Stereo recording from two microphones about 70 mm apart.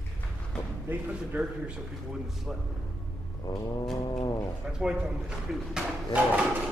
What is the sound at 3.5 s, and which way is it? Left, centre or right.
Speech, left.